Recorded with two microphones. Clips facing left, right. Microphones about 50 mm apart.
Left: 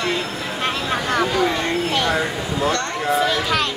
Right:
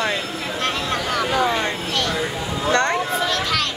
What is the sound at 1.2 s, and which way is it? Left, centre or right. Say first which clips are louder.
Speech: right 2 dB; centre.